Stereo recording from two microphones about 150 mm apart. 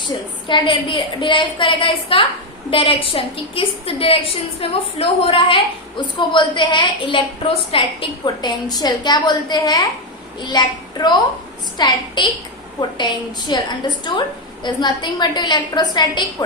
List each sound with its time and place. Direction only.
0.1 s a woman's voice: 30° left (ahead or behind)
13.5 s a woman's voice: 30° left (ahead or behind)